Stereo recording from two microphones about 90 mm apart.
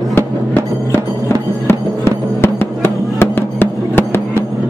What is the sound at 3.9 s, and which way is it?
Music, 25° left (ahead or behind).